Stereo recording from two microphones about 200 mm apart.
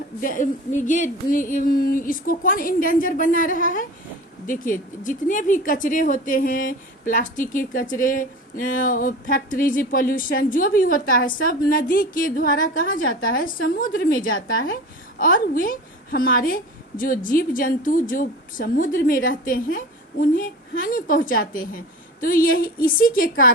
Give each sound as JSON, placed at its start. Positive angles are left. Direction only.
{"t": 0.2, "sound": "a woman's voice", "side_deg": 40}